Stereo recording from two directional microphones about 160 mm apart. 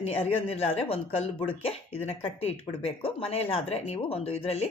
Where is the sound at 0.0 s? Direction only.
40° left (ahead or behind).